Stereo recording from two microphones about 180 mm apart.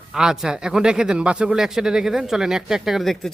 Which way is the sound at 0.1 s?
5° right (ahead or behind).